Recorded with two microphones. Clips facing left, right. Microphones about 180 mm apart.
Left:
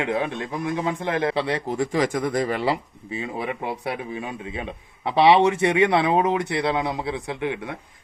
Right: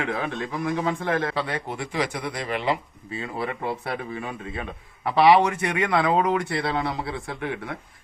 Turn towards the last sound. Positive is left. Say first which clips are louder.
# left 3 dB
turn(degrees=15)  # may be behind; listen again after turning